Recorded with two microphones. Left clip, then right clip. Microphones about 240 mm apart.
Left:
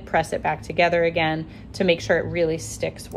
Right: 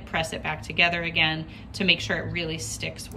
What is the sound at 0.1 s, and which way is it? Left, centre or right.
A woman's voice, centre.